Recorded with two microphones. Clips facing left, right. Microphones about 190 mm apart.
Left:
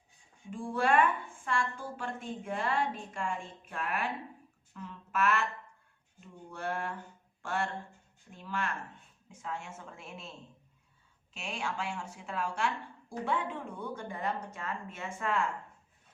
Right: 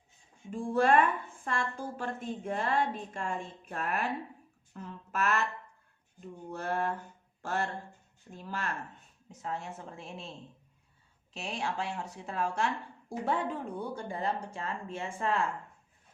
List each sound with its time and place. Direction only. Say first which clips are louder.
0.5 s a woman's voice: right 3 dB; 40° right (ahead or behind)
11.3 s a woman's voice: right 2 dB; 35° right (ahead or behind)